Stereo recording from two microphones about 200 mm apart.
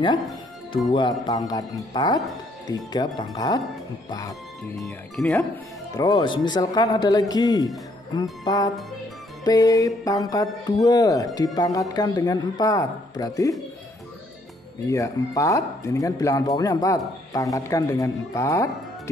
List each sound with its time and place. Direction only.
0.9 s speech: 20° left (ahead or behind)
4.7 s speech: centre (ahead or behind)
5.9 s speech: 20° left (ahead or behind)
14.9 s speech: 15° left (ahead or behind)